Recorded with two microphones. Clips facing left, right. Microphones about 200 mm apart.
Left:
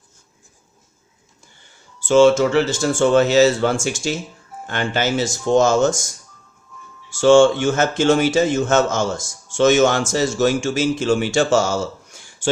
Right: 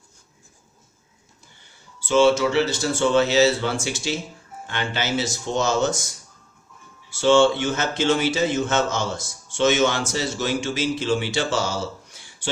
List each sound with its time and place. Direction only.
2.0 s speech: 50° left (ahead or behind)
7.1 s speech: 45° left (ahead or behind)